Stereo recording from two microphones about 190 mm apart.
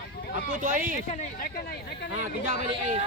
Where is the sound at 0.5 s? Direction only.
45° right (ahead or behind).